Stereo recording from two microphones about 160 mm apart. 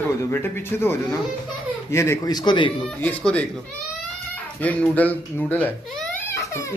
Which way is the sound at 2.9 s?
10° left (ahead or behind).